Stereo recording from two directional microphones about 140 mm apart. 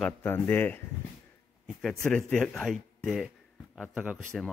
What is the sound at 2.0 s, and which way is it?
A man's voice, 5° left (ahead or behind).